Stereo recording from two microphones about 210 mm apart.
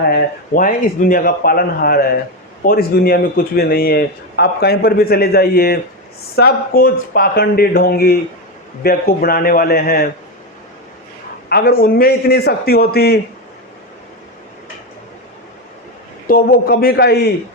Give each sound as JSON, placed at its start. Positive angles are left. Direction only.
{"t": 0.1, "sound": "a man's voice", "side_deg": 40}
{"t": 11.4, "sound": "a man's voice", "side_deg": 45}
{"t": 16.2, "sound": "a man's voice", "side_deg": 45}